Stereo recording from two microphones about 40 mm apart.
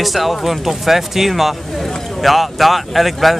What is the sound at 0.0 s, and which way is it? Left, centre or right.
Speech, centre.